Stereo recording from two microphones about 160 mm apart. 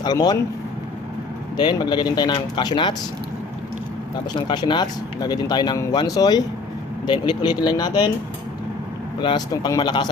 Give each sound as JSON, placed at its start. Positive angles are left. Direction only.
{"t": 0.0, "sound": "speech", "side_deg": 25}
{"t": 1.5, "sound": "speech", "side_deg": 25}
{"t": 4.4, "sound": "speech", "side_deg": 30}
{"t": 9.2, "sound": "speech", "side_deg": 25}